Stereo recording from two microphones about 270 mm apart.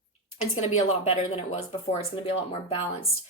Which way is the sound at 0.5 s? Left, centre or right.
Left.